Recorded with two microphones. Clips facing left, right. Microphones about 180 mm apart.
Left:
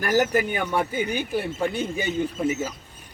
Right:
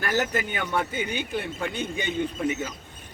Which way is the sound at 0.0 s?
10° left (ahead or behind).